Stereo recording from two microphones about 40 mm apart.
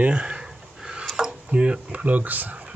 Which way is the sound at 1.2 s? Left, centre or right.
Centre.